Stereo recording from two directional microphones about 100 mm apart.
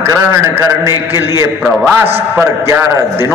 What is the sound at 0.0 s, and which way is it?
A man's voice, 30° right (ahead or behind).